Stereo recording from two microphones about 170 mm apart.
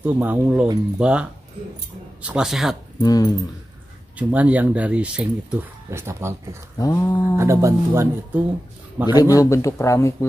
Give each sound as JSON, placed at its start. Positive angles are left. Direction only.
{"t": 0.0, "sound": "speech", "side_deg": -10}
{"t": 2.2, "sound": "speech", "side_deg": -5}
{"t": 3.0, "sound": "a sound", "side_deg": 20}
{"t": 4.2, "sound": "speech", "side_deg": -10}
{"t": 6.8, "sound": "a sound", "side_deg": 20}
{"t": 7.3, "sound": "speech", "side_deg": -15}
{"t": 9.2, "sound": "speech", "side_deg": 20}